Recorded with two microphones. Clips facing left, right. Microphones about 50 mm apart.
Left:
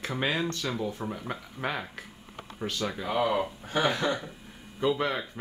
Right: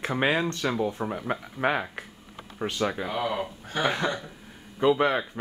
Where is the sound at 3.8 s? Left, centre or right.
Centre.